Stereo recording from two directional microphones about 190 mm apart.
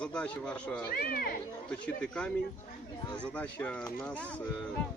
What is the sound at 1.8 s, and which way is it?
Speech, 5° left (ahead or behind).